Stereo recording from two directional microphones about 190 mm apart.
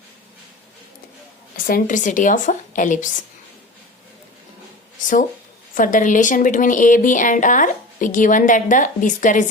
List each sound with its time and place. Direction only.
1.5 s speech: 50° left (ahead or behind)
5.7 s speech: 45° left (ahead or behind)